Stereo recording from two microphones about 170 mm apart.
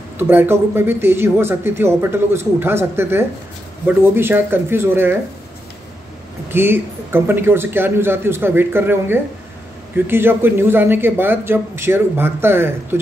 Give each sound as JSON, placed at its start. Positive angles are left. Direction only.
{"t": 0.2, "sound": "speech", "side_deg": -10}
{"t": 6.5, "sound": "speech", "side_deg": -15}